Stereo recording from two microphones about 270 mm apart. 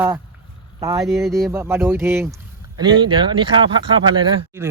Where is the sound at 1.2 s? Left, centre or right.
Centre.